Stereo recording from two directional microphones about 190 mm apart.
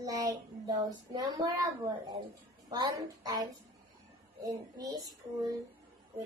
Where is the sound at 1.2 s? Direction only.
20° right (ahead or behind).